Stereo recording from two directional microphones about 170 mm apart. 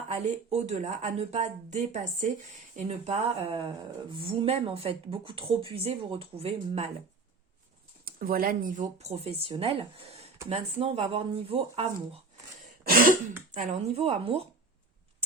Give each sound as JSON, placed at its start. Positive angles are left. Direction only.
{"t": 0.1, "sound": "speech", "side_deg": -40}
{"t": 8.0, "sound": "speech", "side_deg": -60}
{"t": 12.9, "sound": "throat clearing", "side_deg": -55}
{"t": 13.5, "sound": "speech", "side_deg": -45}